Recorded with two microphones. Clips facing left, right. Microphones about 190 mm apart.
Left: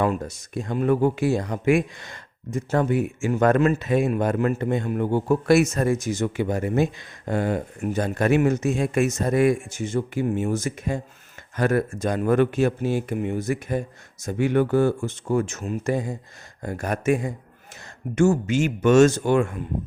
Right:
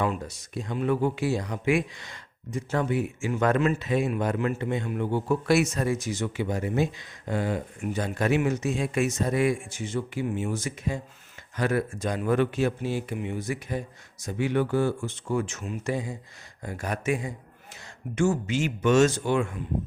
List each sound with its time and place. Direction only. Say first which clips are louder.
0.0 s speech: left 5 dB; 50° left (ahead or behind)